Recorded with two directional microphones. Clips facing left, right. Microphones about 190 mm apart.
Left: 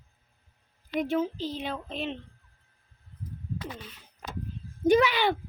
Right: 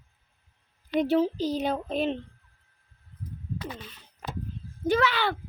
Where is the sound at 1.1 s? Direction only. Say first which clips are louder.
Right 6 dB; 35° right (ahead or behind).